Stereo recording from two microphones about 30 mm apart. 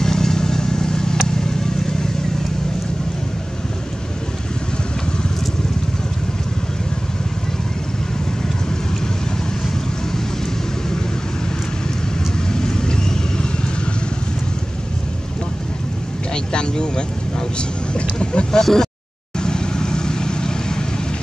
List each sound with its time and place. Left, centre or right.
0.0 s vehicle: centre
12.5 s vehicle: left
16.5 s vehicle: left
18.5 s speech: centre
19.4 s vehicle: left